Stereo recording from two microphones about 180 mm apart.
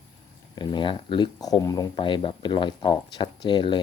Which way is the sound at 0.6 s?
25° left (ahead or behind).